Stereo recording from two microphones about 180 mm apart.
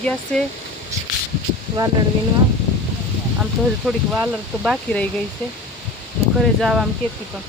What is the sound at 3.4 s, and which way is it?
Speech, centre (ahead or behind).